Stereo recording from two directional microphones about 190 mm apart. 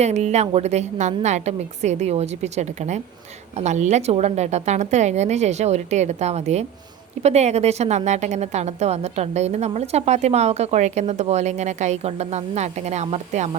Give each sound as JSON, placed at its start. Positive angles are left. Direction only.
{"t": 0.0, "sound": "a woman's voice", "side_deg": -35}